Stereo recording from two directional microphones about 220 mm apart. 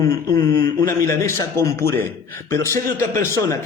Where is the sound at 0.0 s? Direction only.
15° left (ahead or behind).